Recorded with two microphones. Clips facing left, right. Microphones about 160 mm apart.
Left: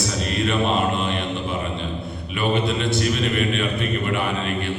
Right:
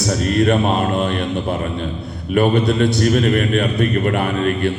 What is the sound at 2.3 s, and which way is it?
A man's voice, 45° right (ahead or behind).